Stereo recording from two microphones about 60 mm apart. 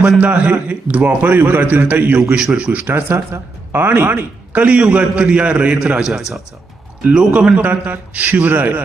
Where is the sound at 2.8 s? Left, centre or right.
Right.